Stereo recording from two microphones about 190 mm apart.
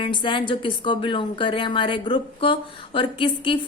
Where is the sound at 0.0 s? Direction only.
25° left (ahead or behind).